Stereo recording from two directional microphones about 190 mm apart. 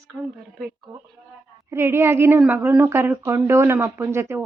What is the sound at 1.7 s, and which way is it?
A woman's voice, 15° right (ahead or behind).